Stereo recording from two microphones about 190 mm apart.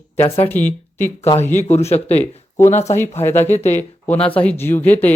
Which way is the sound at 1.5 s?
35° left (ahead or behind).